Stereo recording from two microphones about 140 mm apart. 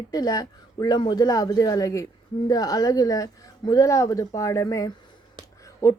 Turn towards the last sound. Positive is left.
turn(degrees=20)  # may be behind; listen again after turning